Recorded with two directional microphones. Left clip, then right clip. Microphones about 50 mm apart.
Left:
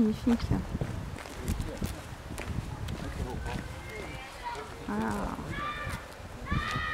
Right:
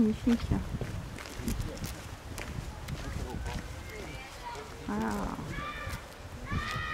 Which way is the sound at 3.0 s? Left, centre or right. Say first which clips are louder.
Left 2 dB; centre.